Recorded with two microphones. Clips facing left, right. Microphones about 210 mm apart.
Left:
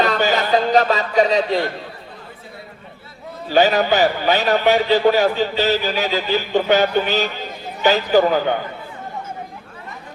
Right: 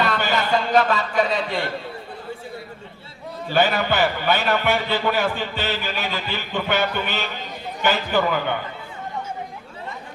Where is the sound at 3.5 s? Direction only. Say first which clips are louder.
Left 5 dB; 40° left (ahead or behind).